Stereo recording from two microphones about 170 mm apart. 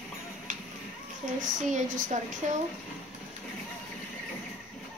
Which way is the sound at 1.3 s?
45° right (ahead or behind).